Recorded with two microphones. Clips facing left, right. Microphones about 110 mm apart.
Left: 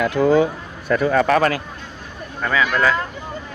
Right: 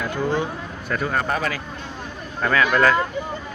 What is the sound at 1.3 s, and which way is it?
Speech, 60° left (ahead or behind).